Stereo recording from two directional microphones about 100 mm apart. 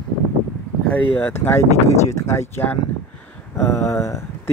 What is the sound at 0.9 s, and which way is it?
Speech, 20° left (ahead or behind).